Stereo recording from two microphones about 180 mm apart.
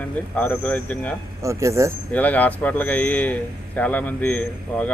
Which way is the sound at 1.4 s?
15° right (ahead or behind).